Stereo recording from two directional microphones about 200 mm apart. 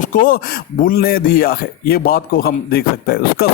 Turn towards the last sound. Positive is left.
turn(degrees=50)  # may be behind; listen again after turning